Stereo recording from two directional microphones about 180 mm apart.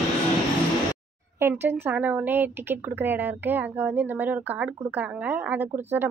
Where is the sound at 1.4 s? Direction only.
15° right (ahead or behind).